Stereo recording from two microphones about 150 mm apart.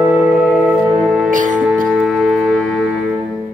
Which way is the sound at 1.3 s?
60° right (ahead or behind).